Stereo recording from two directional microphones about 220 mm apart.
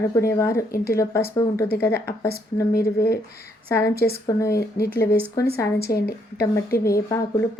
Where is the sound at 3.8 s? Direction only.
45° left (ahead or behind).